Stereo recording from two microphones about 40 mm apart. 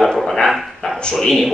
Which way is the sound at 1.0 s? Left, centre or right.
Centre.